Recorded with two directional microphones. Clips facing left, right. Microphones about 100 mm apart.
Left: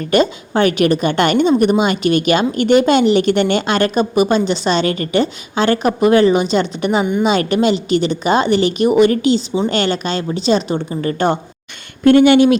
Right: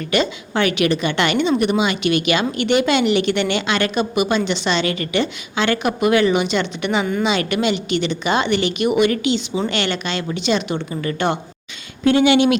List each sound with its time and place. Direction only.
0.1 s a woman's voice: 45° left (ahead or behind)
12.0 s speech: 50° left (ahead or behind)